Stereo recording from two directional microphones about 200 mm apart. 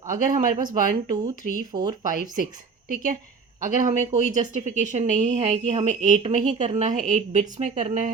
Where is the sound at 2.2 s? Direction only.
20° right (ahead or behind).